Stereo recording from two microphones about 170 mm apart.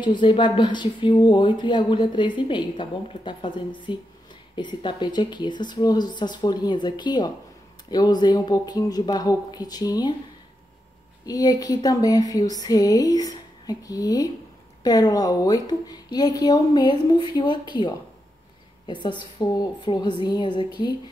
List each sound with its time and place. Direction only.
0.0 s speech: 30° left (ahead or behind)
11.2 s speech: 20° left (ahead or behind)